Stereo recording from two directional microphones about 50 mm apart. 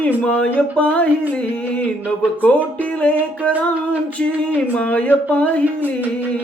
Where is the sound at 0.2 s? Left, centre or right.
Left.